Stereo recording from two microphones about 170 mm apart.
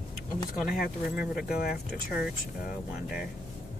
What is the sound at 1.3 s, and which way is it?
Speech, 65° left (ahead or behind).